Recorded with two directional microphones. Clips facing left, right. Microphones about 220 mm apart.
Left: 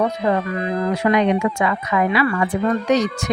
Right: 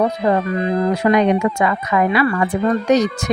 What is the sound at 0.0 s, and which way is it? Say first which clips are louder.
Speech: right 2 dB; 30° right (ahead or behind).